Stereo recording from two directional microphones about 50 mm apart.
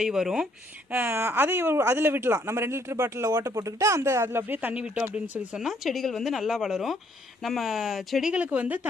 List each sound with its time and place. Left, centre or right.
0.0 s speech: centre
0.9 s speech: right
4.6 s speech: right
5.9 s speech: centre
8.3 s speech: right